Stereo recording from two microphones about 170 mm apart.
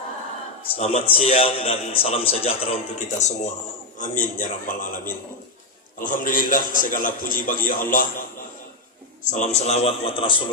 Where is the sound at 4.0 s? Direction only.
50° left (ahead or behind).